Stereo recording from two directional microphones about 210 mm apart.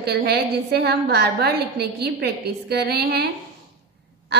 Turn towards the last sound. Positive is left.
turn(degrees=-50)  # may be behind; listen again after turning